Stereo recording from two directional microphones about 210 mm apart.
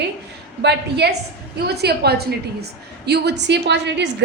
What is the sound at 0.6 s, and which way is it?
A woman's voice, 50° right (ahead or behind).